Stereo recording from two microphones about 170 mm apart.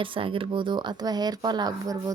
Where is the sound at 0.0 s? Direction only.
30° right (ahead or behind).